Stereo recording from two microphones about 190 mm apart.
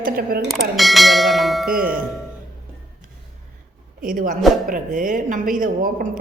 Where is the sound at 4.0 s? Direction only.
45° right (ahead or behind).